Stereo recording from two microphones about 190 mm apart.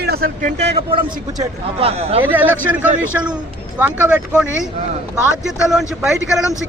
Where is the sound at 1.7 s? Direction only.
30° right (ahead or behind).